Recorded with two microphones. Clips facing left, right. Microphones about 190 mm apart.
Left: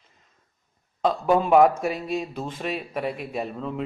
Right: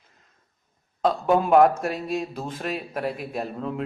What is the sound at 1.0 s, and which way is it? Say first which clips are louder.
A man's voice: even; centre (ahead or behind).